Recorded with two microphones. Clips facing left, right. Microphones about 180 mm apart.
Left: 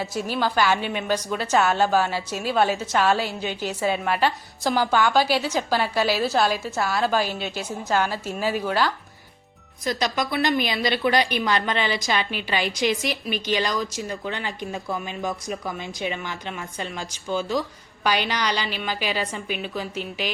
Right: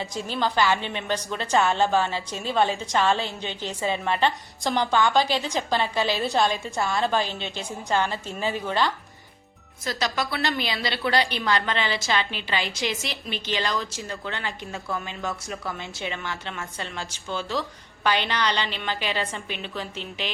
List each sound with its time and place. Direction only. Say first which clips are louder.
0.0 s a woman's voice: left 2 dB; 10° left (ahead or behind)
9.8 s a woman's voice: left 3 dB; 20° left (ahead or behind)